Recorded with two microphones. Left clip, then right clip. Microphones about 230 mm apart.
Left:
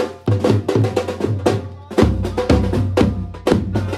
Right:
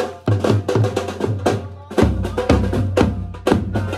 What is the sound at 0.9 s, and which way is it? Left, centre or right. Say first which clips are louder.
Music: left 2 dB; left.